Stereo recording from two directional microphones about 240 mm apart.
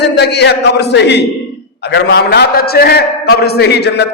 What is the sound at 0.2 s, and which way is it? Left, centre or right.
A man's voice, left.